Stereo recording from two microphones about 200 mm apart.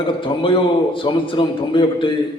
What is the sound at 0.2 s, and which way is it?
A man's voice, 25° left (ahead or behind).